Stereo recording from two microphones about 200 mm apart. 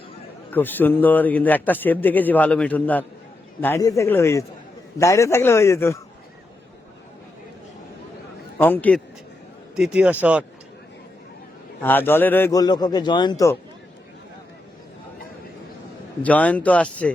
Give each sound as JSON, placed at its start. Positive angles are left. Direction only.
{"t": 0.5, "sound": "speech", "side_deg": 10}
{"t": 8.5, "sound": "a man's voice", "side_deg": 10}
{"t": 9.7, "sound": "a man's voice", "side_deg": -5}
{"t": 11.8, "sound": "speech", "side_deg": 10}
{"t": 16.2, "sound": "speech", "side_deg": 5}